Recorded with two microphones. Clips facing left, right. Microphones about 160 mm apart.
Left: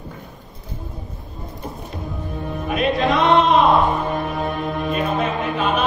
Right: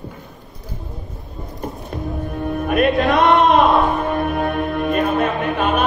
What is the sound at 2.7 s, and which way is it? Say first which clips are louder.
Music: right 3 dB; 55° right (ahead or behind).